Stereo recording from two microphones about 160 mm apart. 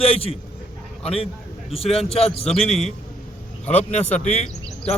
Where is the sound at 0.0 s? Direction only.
40° left (ahead or behind).